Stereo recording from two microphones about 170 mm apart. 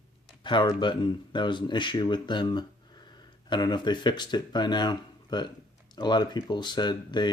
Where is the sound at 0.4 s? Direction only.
25° left (ahead or behind).